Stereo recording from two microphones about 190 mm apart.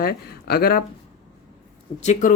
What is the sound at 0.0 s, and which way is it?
Speech, 55° left (ahead or behind).